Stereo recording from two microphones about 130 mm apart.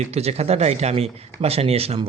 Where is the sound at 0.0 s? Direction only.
55° right (ahead or behind).